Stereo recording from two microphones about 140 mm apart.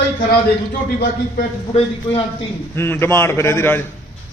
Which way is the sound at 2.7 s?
15° left (ahead or behind).